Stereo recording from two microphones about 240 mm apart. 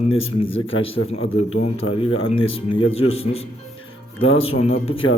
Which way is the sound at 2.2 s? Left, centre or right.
Left.